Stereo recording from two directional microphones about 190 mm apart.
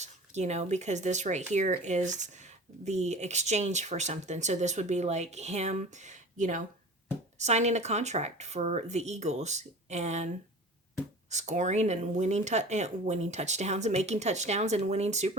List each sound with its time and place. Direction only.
0.0 s speech: 35° right (ahead or behind)
11.3 s speech: 35° right (ahead or behind)